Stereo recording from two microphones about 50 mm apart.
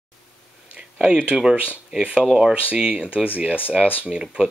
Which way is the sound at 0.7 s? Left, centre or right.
Centre.